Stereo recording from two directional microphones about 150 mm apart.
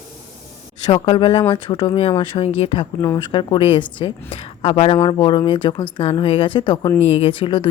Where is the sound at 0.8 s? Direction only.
35° left (ahead or behind).